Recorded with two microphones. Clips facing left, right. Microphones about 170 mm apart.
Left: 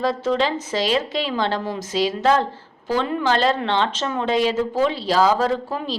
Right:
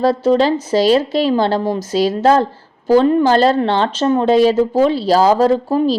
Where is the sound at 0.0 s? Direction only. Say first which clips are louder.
Right 7 dB; 35° right (ahead or behind).